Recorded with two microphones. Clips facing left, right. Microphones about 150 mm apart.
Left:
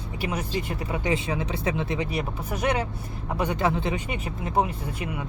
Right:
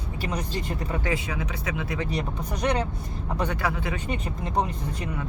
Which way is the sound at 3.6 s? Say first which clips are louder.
Left 4 dB; 25° left (ahead or behind).